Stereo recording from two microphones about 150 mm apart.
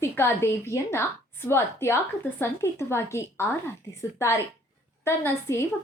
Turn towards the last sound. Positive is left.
turn(degrees=15)  # may be behind; listen again after turning